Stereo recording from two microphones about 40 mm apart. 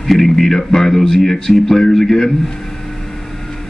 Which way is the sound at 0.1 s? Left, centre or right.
Centre.